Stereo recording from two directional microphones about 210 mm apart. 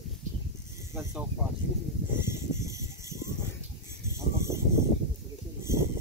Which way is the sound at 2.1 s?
15° right (ahead or behind).